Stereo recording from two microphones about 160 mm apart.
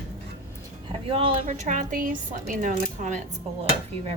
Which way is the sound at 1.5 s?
55° right (ahead or behind).